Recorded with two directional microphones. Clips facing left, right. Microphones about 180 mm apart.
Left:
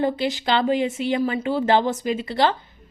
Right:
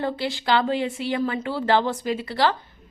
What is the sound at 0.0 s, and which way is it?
A woman's voice, 20° left (ahead or behind).